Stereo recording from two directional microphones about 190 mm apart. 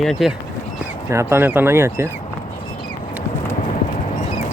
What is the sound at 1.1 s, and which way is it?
Speech, 15° right (ahead or behind).